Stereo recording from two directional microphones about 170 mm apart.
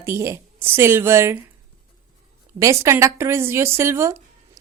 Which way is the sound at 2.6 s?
20° right (ahead or behind).